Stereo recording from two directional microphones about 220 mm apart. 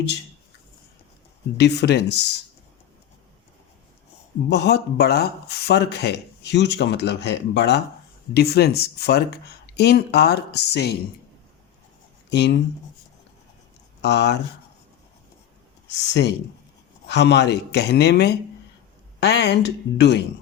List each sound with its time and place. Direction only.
1.5 s speech: 50° left (ahead or behind)
4.4 s speech: 50° left (ahead or behind)
12.3 s speech: 50° left (ahead or behind)
14.0 s speech: 50° left (ahead or behind)
15.9 s speech: 55° left (ahead or behind)